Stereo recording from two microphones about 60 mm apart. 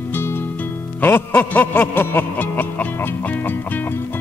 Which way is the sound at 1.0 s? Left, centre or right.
Left.